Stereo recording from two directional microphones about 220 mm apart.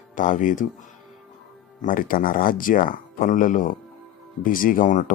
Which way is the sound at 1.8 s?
40° left (ahead or behind).